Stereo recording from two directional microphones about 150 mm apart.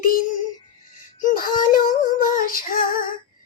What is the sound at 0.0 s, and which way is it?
Music, 70° left (ahead or behind).